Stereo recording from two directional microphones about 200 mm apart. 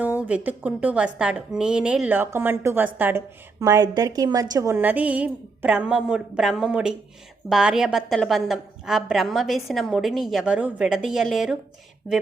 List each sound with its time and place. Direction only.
0.0 s a woman's voice: 5° right (ahead or behind)